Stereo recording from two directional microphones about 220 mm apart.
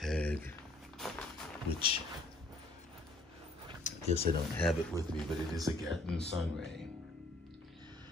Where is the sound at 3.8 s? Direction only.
30° left (ahead or behind).